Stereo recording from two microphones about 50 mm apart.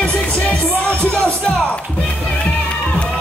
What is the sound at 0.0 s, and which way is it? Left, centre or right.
Music, left.